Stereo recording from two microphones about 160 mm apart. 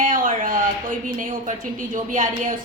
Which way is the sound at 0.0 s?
55° right (ahead or behind).